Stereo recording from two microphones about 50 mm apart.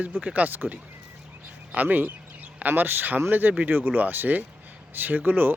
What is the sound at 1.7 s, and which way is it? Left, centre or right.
Speech, right.